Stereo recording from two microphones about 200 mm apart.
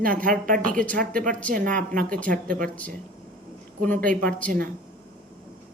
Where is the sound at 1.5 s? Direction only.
40° right (ahead or behind).